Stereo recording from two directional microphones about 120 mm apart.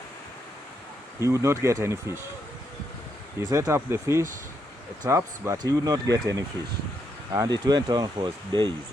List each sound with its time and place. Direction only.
1.2 s speech: 25° right (ahead or behind)
3.5 s speech: 25° right (ahead or behind)